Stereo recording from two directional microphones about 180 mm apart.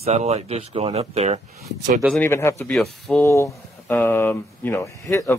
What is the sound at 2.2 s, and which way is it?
Speech, 15° left (ahead or behind).